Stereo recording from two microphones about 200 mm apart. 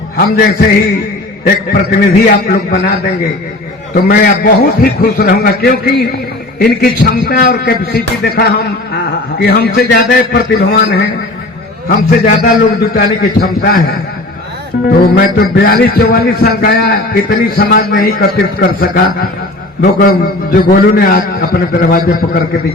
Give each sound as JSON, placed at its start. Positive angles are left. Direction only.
{"t": 0.2, "sound": "a man's voice", "side_deg": 50}
{"t": 1.7, "sound": "a man's voice", "side_deg": 45}
{"t": 3.9, "sound": "a man's voice", "side_deg": 45}
{"t": 15.0, "sound": "a man's voice", "side_deg": 50}